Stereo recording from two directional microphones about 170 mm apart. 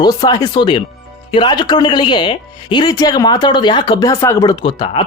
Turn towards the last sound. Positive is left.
turn(degrees=25)  # may be behind; listen again after turning